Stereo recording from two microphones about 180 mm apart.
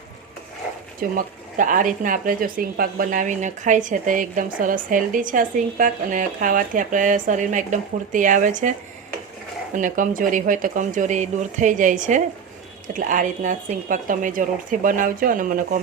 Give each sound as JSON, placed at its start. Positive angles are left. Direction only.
{"t": 0.9, "sound": "speech", "side_deg": -50}
{"t": 9.7, "sound": "speech", "side_deg": -45}